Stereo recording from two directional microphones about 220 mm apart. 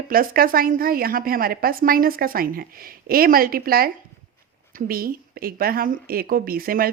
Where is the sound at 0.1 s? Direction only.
40° right (ahead or behind).